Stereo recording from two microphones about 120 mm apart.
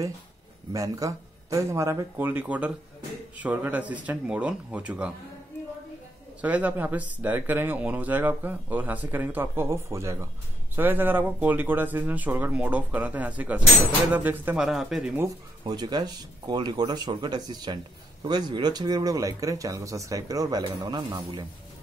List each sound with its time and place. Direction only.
0.7 s speech: 30° right (ahead or behind); by 5.1 s 10° right (ahead or behind)
6.4 s speech: 15° right (ahead or behind)
14.6 s speech: 5° right (ahead or behind)
15.6 s speech: 35° right (ahead or behind)
20.6 s speech: 40° right (ahead or behind)